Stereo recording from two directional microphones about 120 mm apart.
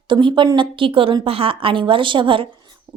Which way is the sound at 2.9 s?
40° right (ahead or behind).